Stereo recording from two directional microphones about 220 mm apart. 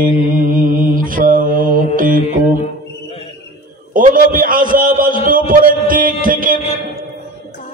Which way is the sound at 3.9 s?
40° right (ahead or behind).